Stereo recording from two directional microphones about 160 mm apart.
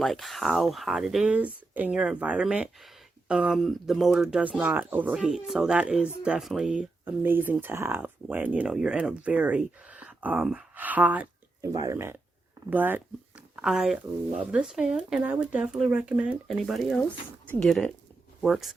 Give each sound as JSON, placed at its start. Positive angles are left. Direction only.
{"t": 0.0, "sound": "speech", "side_deg": 0}
{"t": 11.6, "sound": "speech", "side_deg": -20}